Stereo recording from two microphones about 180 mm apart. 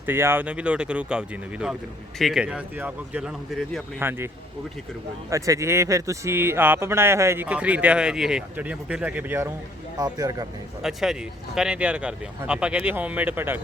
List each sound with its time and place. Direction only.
0.0 s speech: 10° right (ahead or behind)
5.3 s speech: 15° right (ahead or behind)
10.8 s speech: centre (ahead or behind)